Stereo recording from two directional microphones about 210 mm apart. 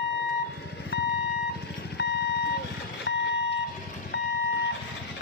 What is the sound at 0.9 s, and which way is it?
Vehicle, 55° left (ahead or behind).